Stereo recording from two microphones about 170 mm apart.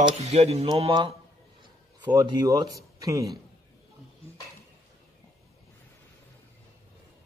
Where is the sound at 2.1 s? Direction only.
20° right (ahead or behind).